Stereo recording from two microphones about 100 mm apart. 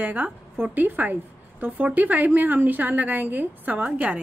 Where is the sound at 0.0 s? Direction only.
15° right (ahead or behind).